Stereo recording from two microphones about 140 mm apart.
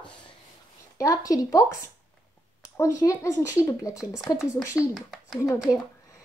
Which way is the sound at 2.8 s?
20° left (ahead or behind).